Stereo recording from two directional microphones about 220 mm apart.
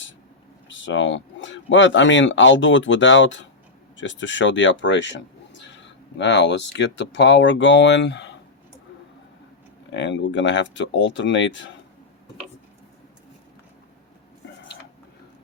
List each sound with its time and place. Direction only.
0.7 s speech: 60° left (ahead or behind)
9.9 s speech: 55° left (ahead or behind)